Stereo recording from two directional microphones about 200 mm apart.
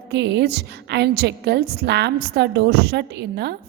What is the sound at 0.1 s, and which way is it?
A woman's voice, 55° right (ahead or behind).